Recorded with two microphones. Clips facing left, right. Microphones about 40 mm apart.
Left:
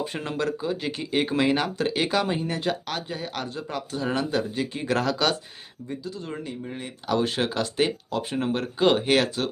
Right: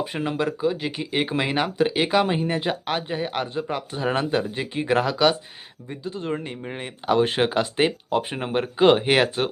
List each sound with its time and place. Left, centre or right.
0.0 s speech: centre
5.9 s speech: right